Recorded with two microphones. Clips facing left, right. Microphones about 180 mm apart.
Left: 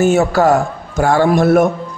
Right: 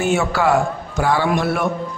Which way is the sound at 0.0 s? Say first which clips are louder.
Left 6 dB; 40° left (ahead or behind).